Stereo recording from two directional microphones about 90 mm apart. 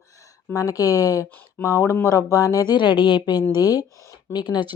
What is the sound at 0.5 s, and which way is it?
A woman's voice, 40° left (ahead or behind).